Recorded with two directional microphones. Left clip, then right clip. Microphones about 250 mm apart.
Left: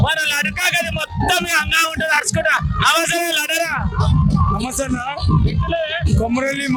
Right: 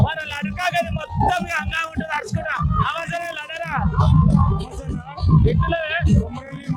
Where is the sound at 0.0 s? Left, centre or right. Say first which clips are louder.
Left 8 dB; left.